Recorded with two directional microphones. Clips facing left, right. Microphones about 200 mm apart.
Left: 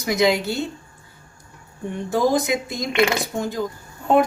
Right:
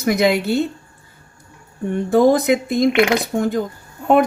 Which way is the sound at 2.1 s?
60° right (ahead or behind).